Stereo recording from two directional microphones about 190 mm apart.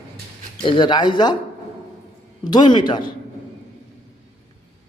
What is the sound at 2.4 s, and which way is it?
Speech, 25° left (ahead or behind).